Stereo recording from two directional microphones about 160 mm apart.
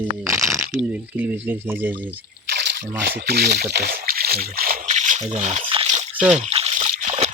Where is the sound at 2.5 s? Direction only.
90° right; by 5.2 s 50° right (ahead or behind).